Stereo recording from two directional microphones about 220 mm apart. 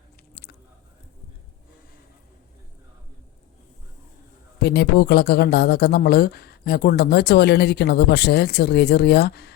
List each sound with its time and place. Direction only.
4.6 s speech: 45° left (ahead or behind)